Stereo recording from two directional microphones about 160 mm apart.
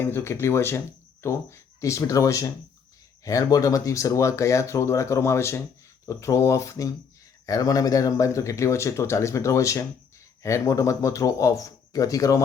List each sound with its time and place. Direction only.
0.0 s speech: 15° left (ahead or behind)